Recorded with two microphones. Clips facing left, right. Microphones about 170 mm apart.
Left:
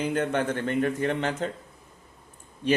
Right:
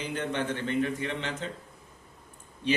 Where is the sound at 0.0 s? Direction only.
50° left (ahead or behind).